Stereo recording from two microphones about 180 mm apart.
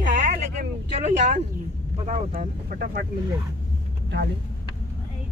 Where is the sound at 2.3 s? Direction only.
50° right (ahead or behind).